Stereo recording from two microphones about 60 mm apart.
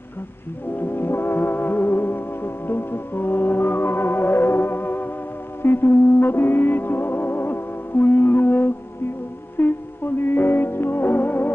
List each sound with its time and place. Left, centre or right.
0.7 s music: left